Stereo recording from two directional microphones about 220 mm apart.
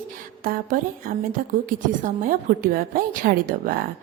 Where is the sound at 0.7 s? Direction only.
40° right (ahead or behind).